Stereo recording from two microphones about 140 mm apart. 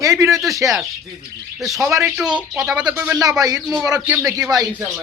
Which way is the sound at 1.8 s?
20° right (ahead or behind).